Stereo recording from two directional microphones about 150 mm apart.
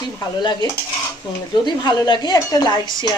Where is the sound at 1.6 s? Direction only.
30° left (ahead or behind).